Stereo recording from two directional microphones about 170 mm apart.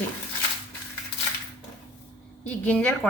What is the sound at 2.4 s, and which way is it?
Speech, 10° left (ahead or behind).